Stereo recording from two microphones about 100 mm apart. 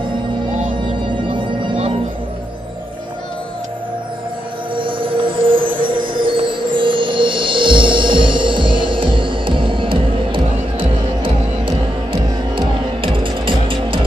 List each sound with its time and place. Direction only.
1.0 s music: 65° right (ahead or behind)
4.7 s music: 60° right (ahead or behind)